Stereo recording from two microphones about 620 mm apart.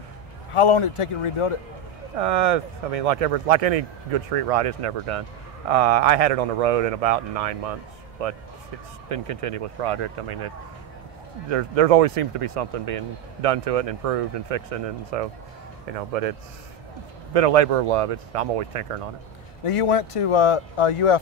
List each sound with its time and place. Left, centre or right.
0.6 s speech: left
2.1 s speech: right
11.5 s speech: right
19.6 s speech: left